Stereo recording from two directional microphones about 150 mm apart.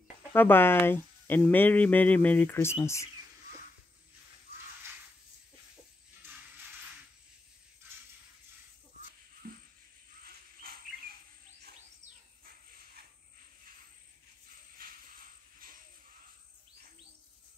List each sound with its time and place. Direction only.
0.3 s speech: 15° left (ahead or behind)
9.4 s music: 75° right (ahead or behind)
10.6 s a sound: 80° right